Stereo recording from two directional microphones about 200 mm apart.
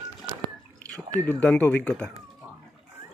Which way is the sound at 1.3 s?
5° left (ahead or behind).